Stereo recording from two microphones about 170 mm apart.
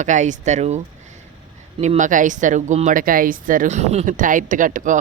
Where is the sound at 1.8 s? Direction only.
45° right (ahead or behind).